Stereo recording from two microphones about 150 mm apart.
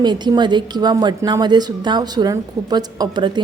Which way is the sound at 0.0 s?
30° right (ahead or behind).